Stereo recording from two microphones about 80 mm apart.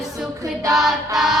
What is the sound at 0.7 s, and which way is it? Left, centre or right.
Music, centre.